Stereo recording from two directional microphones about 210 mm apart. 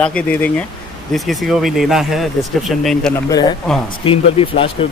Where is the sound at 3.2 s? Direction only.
20° left (ahead or behind).